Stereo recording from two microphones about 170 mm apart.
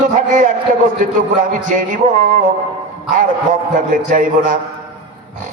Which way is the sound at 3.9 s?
50° right (ahead or behind).